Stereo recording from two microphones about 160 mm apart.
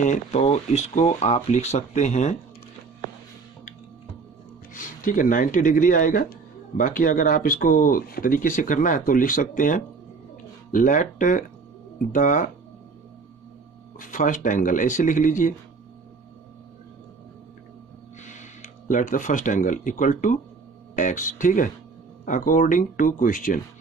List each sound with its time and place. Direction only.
0.0 s speech: 45° left (ahead or behind)
4.7 s speech: 55° left (ahead or behind)
13.9 s speech: 55° left (ahead or behind)
18.2 s speech: 50° left (ahead or behind)